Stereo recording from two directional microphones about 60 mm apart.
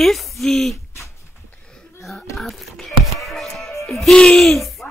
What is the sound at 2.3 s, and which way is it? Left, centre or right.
Music, centre.